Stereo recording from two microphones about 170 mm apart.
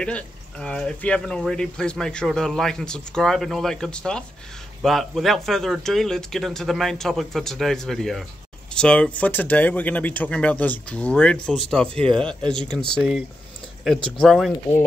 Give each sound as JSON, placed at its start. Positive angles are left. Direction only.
{"t": 0.0, "sound": "speech", "side_deg": 5}
{"t": 13.9, "sound": "speech", "side_deg": 30}
{"t": 14.2, "sound": "speech", "side_deg": 0}